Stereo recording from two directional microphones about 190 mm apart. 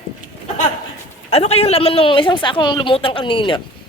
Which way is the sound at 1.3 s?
30° left (ahead or behind).